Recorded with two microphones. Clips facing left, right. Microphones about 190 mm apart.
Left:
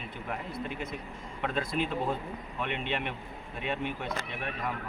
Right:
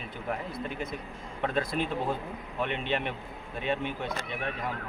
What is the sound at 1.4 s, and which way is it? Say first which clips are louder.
Speech: right 2 dB; 35° right (ahead or behind).